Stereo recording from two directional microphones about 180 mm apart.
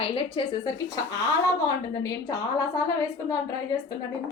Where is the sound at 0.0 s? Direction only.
30° left (ahead or behind).